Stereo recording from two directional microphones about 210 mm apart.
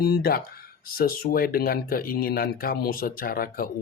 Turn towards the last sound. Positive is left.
turn(degrees=45)  # may be behind; listen again after turning